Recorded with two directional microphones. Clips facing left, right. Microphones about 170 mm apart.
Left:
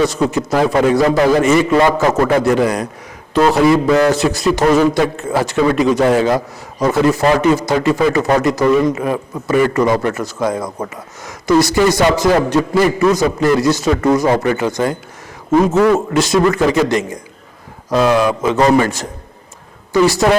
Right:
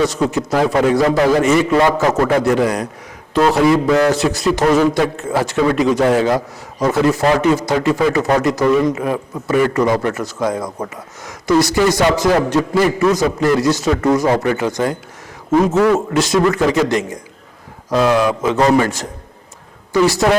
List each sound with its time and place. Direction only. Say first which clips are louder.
0.0 s speech: left 1 dB; 20° left (ahead or behind)
12.1 s speech: left 1 dB; 25° left (ahead or behind)
20.2 s speech: left 1 dB; 25° left (ahead or behind)